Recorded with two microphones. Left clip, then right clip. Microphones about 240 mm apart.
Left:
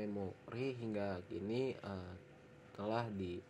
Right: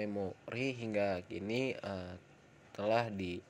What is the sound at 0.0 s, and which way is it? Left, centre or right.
A man's voice, right.